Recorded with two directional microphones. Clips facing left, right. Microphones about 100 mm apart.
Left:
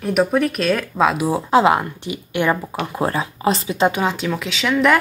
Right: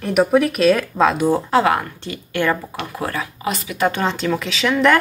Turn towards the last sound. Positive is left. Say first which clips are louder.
# right 1 dB
turn(degrees=0)  # may be behind; listen again after turning